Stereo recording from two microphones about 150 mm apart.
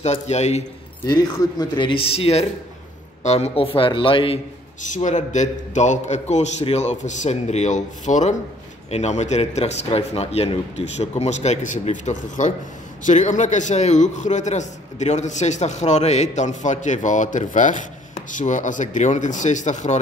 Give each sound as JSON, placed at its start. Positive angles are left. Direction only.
{"t": 0.0, "sound": "a man's voice", "side_deg": 45}
{"t": 1.0, "sound": "speech", "side_deg": 30}
{"t": 4.8, "sound": "a man's voice", "side_deg": 55}